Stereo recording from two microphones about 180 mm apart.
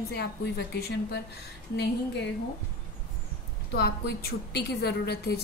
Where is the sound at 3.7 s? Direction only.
60° left (ahead or behind).